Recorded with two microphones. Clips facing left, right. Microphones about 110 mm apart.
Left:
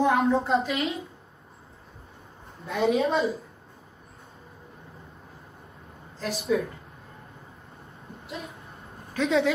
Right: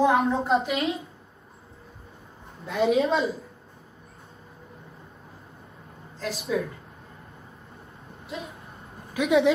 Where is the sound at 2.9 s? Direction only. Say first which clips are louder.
Right 2 dB; centre (ahead or behind).